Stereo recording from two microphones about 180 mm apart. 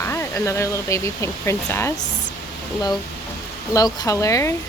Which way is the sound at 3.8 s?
20° left (ahead or behind).